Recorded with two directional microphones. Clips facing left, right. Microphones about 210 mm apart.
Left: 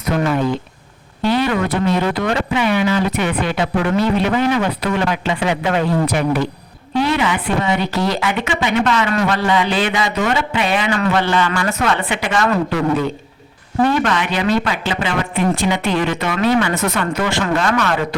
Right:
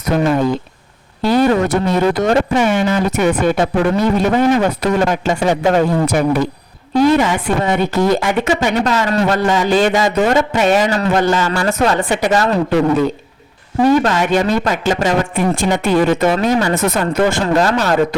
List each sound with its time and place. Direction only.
1.2 s a man's voice: 40° right (ahead or behind)
14.0 s a man's voice: 40° right (ahead or behind)